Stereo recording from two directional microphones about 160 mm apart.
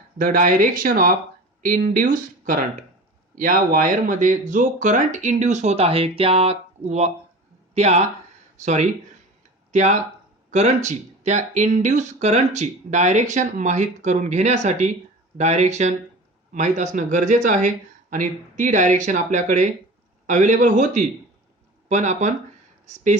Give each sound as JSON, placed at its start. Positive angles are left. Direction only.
{"t": 0.2, "sound": "speech", "side_deg": -60}